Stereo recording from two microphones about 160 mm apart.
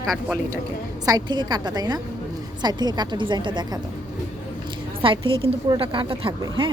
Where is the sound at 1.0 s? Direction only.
25° right (ahead or behind).